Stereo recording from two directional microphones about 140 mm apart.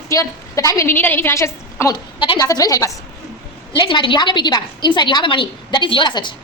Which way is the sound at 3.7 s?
35° left (ahead or behind).